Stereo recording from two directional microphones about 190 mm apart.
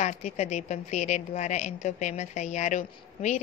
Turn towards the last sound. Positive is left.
turn(degrees=40)  # may be behind; listen again after turning